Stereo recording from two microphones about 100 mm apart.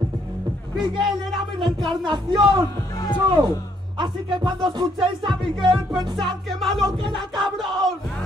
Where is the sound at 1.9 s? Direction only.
45° right (ahead or behind).